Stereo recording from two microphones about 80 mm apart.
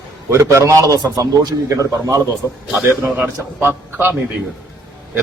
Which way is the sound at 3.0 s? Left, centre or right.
Right.